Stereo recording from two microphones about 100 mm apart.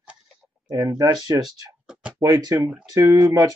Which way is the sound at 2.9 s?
35° right (ahead or behind).